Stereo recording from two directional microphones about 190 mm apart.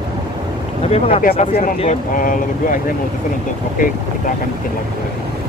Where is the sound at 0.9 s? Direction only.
30° left (ahead or behind).